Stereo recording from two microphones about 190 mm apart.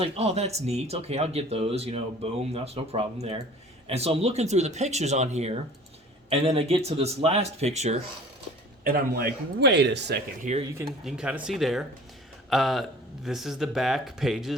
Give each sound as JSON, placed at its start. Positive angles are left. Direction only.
{"t": 0.0, "sound": "speech", "side_deg": -35}
{"t": 8.8, "sound": "speech", "side_deg": -50}
{"t": 10.4, "sound": "speech", "side_deg": -35}
{"t": 10.8, "sound": "speech", "side_deg": -5}